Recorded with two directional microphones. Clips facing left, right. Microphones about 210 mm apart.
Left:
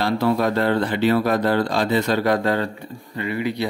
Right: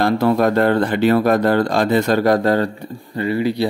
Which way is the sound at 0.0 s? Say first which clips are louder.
Right 4 dB; 50° right (ahead or behind).